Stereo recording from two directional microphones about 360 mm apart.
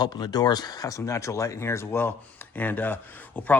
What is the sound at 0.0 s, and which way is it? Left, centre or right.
Speech, centre.